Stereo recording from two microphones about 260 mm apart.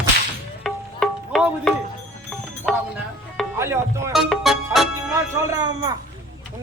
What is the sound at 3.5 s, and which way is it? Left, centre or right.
Speech, centre.